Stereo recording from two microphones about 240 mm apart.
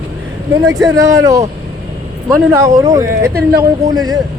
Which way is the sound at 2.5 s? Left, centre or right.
Centre.